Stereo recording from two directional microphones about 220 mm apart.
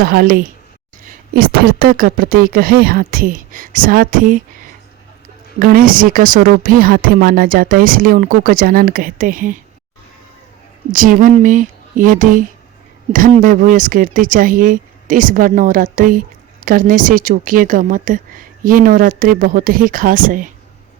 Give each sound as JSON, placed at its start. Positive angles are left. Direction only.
{"t": 0.0, "sound": "a woman's voice", "side_deg": -40}
{"t": 5.5, "sound": "a woman's voice", "side_deg": -40}
{"t": 10.9, "sound": "a woman's voice", "side_deg": -40}
{"t": 13.4, "sound": "a woman's voice", "side_deg": -40}